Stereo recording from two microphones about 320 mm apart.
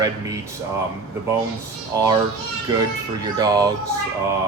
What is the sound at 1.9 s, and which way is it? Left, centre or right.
Speech, centre.